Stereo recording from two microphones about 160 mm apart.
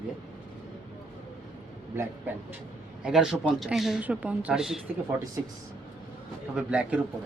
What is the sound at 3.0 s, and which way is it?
Speech, 5° right (ahead or behind).